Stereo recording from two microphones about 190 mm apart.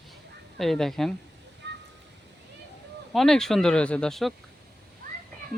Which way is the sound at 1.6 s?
65° right (ahead or behind).